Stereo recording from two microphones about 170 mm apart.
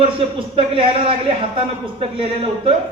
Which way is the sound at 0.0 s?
35° right (ahead or behind).